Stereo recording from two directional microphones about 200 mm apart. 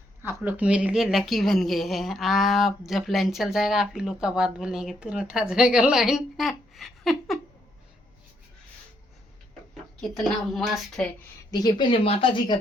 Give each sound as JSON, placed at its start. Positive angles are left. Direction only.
{"t": 0.4, "sound": "speech", "side_deg": -5}
{"t": 10.2, "sound": "speech", "side_deg": 0}
{"t": 11.5, "sound": "speech", "side_deg": 20}